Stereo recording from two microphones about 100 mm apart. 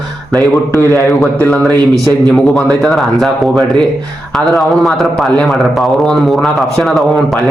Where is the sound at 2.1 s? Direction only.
5° left (ahead or behind).